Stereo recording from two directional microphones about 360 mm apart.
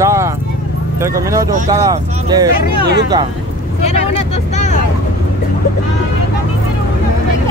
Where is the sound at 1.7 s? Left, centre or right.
Centre.